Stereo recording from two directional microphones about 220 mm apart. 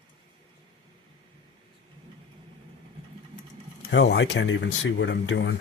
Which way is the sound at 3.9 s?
55° left (ahead or behind).